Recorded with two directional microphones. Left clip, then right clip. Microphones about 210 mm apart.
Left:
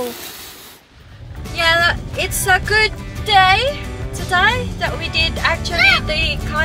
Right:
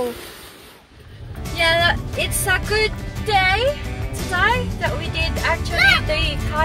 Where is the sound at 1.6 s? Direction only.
20° left (ahead or behind).